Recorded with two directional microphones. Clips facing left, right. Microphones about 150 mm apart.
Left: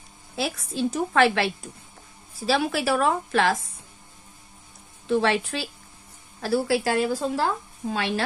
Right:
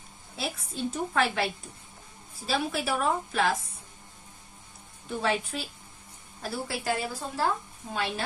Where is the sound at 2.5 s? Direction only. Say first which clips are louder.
Left 6 dB; 90° left.